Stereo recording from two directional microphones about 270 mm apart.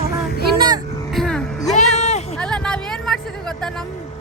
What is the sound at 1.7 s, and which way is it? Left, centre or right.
Music, left.